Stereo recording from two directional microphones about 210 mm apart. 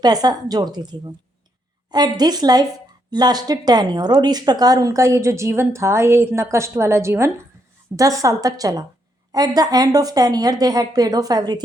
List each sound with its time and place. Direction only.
0.0 s a woman's voice: 20° right (ahead or behind)